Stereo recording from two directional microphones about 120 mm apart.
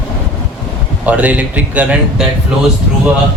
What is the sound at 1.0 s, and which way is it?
Speech, 10° right (ahead or behind).